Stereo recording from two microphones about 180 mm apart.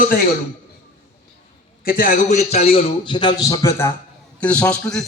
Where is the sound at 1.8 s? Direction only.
50° left (ahead or behind).